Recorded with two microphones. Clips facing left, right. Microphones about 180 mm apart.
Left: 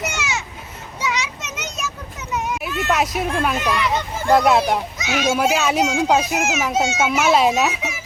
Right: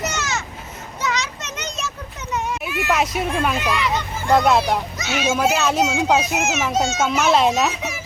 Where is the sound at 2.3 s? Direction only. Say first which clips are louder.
Left 1 dB; 5° left (ahead or behind).